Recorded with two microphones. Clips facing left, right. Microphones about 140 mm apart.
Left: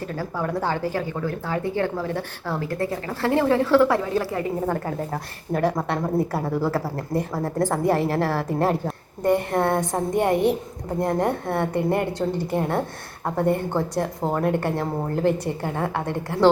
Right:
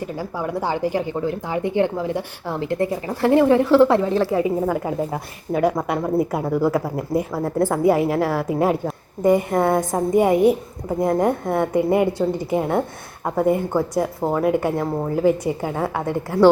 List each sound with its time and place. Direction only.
0.0 s a woman's voice: 10° right (ahead or behind)
4.6 s a woman's voice: 5° right (ahead or behind)